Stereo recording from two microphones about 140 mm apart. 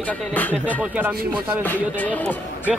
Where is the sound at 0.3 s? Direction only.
10° left (ahead or behind).